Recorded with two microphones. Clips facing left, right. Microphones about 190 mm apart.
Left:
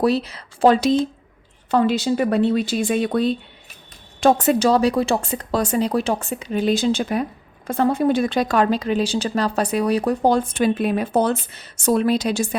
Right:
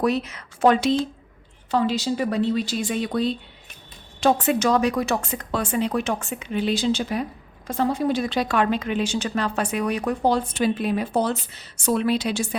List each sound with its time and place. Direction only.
0.0 s speech: 35° left (ahead or behind)
1.7 s a woman's voice: 55° left (ahead or behind); by 10.2 s 35° left (ahead or behind)
10.2 s a woman's voice: 50° left (ahead or behind)